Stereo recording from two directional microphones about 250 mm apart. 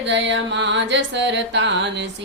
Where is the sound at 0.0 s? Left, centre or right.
Right.